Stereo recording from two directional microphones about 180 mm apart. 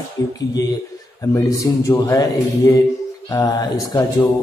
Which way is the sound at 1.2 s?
15° left (ahead or behind).